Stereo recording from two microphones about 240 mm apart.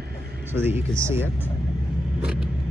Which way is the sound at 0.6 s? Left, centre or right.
Centre.